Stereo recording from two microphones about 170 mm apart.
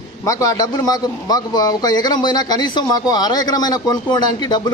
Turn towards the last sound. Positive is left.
turn(degrees=25)  # may be behind; listen again after turning